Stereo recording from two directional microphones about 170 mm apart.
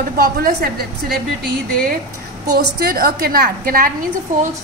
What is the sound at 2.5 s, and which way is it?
A woman's voice, 70° right (ahead or behind).